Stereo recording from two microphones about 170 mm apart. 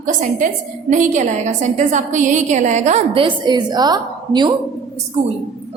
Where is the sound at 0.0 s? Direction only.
50° right (ahead or behind); by 4.5 s 25° right (ahead or behind).